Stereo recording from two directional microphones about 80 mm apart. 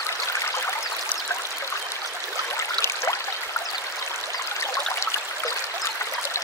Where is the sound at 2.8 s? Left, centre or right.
Left.